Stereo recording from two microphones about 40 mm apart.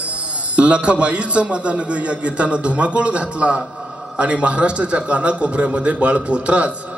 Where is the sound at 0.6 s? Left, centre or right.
Right.